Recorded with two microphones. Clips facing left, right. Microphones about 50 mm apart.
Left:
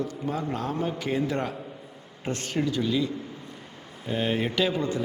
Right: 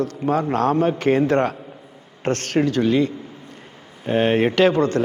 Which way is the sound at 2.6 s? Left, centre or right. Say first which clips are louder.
Right 8 dB; right.